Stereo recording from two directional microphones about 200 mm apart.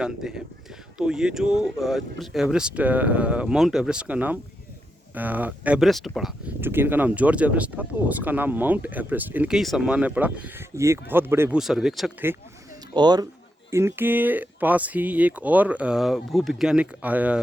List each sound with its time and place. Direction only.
0.0 s speech: centre (ahead or behind)
12.9 s speech: 20° right (ahead or behind)